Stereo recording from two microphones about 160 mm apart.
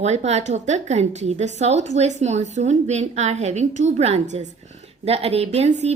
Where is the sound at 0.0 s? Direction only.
45° right (ahead or behind).